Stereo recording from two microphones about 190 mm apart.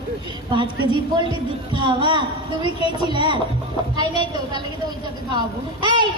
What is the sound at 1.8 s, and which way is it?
A man's voice, 25° right (ahead or behind).